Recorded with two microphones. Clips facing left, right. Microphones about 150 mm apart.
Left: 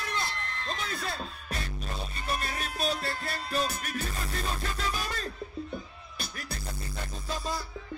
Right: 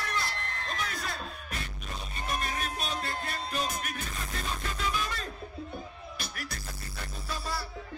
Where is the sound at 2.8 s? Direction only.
35° left (ahead or behind).